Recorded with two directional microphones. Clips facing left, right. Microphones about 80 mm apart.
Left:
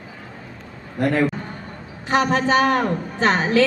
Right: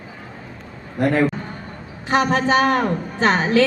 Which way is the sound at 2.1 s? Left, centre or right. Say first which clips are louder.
Right 1 dB; right.